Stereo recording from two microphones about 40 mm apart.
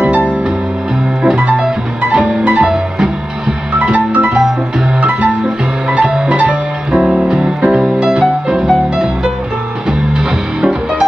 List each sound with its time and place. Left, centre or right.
1.2 s music: right
5.4 s music: right
7.6 s music: centre